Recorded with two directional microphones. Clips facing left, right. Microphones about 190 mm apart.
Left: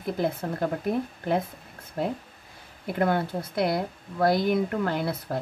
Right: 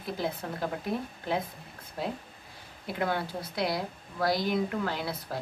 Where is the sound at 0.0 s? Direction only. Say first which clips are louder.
Left 6 dB; 50° left (ahead or behind).